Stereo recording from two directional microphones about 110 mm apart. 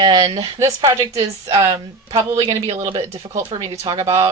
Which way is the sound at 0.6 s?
30° right (ahead or behind).